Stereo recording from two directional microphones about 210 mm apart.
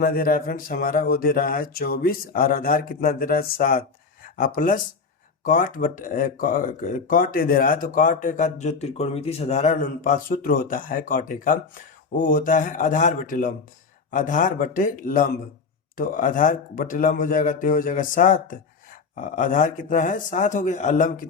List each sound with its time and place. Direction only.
0.0 s speech: 45° left (ahead or behind)